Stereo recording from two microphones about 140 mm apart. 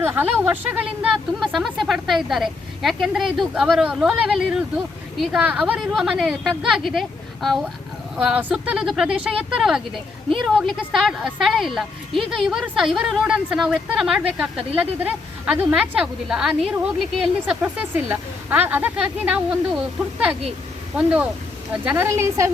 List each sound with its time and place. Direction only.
0.0 s a woman's voice: 15° right (ahead or behind)
1.4 s a woman's voice: centre (ahead or behind)
8.1 s a woman's voice: 5° right (ahead or behind)
20.9 s a woman's voice: 5° right (ahead or behind)